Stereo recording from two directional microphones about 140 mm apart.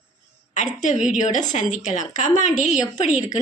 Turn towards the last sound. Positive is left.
turn(degrees=60)  # may be behind; listen again after turning